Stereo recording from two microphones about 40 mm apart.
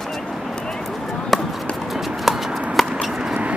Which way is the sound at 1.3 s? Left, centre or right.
Centre.